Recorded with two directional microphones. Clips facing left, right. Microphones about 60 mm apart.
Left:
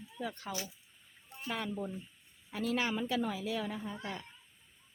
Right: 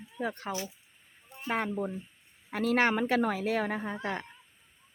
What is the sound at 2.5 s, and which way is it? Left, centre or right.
A woman's voice, right.